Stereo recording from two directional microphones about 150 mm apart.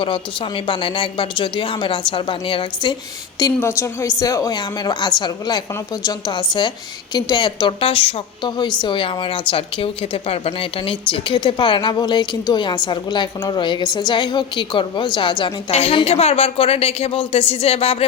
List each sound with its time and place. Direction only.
0.0 s a woman's voice: 35° left (ahead or behind)
3.3 s a woman's voice: 20° left (ahead or behind); by 17.9 s 40° left (ahead or behind)